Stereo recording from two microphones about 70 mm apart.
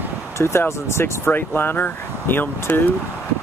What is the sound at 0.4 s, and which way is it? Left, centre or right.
Speech, left.